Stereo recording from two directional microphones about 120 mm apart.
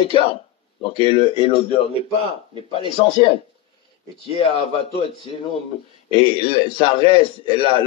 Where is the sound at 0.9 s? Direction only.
50° left (ahead or behind).